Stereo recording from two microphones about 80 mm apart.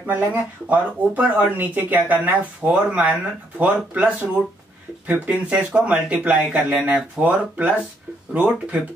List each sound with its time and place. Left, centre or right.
0.0 s speech: centre